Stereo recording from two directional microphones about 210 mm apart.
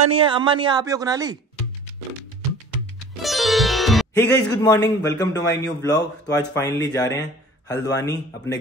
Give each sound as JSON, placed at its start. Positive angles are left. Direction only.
{"t": 0.1, "sound": "a woman's voice", "side_deg": -25}
{"t": 3.2, "sound": "sitar", "side_deg": 0}
{"t": 4.2, "sound": "a man's voice", "side_deg": 15}